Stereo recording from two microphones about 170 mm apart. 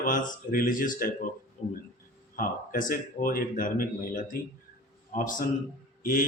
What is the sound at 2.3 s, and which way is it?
A man's voice, 50° left (ahead or behind).